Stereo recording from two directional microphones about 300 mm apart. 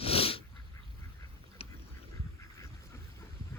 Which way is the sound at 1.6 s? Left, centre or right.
Centre.